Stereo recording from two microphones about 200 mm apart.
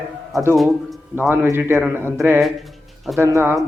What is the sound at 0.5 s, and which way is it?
Speech, centre (ahead or behind).